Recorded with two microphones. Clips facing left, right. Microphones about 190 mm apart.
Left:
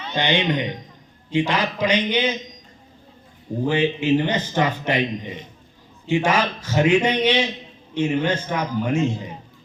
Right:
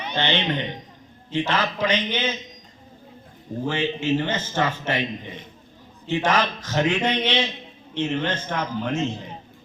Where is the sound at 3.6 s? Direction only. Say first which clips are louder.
Left 4 dB; 15° left (ahead or behind).